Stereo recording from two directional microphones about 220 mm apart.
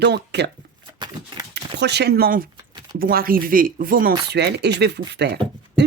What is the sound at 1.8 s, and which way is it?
Speech, 50° right (ahead or behind).